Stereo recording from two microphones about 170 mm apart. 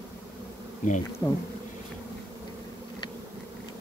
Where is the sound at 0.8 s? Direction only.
50° left (ahead or behind).